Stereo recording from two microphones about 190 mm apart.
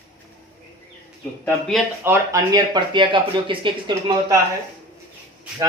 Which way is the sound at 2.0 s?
15° right (ahead or behind).